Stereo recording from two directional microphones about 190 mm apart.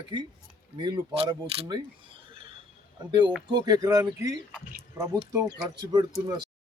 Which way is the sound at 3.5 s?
20° right (ahead or behind).